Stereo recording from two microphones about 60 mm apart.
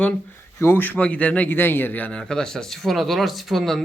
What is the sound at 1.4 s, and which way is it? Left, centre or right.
Speech, left.